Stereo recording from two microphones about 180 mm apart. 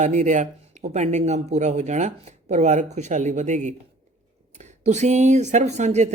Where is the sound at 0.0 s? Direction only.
40° right (ahead or behind).